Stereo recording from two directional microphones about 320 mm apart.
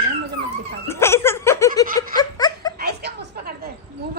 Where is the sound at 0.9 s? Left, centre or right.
Centre.